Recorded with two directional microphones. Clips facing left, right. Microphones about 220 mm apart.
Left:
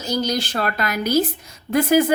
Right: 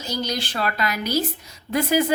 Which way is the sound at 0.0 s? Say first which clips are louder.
Left 5 dB; 45° left (ahead or behind).